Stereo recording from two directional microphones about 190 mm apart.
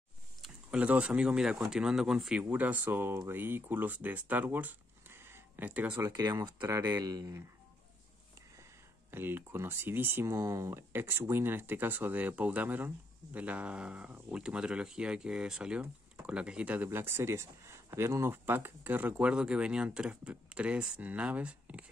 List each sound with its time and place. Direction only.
0.4 s speech: 5° right (ahead or behind)
6.0 s speech: 20° right (ahead or behind)
9.1 s speech: 10° right (ahead or behind)